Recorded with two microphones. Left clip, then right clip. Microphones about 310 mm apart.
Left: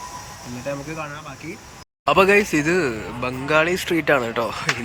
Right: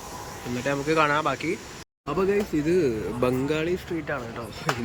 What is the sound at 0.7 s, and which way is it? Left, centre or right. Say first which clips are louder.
Speech: right 8 dB; centre.